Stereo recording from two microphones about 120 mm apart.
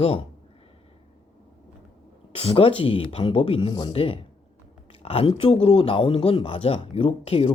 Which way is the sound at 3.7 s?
35° left (ahead or behind).